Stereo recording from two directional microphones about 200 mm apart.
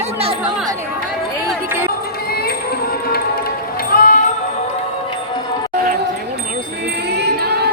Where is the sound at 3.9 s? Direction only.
45° left (ahead or behind).